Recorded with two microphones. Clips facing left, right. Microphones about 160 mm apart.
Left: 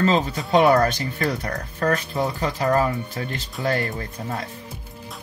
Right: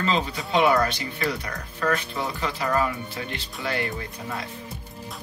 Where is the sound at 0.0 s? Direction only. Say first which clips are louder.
Left 5 dB; 40° left (ahead or behind).